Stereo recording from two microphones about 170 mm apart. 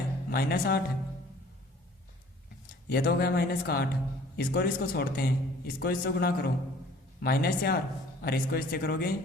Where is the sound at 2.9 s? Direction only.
65° left (ahead or behind).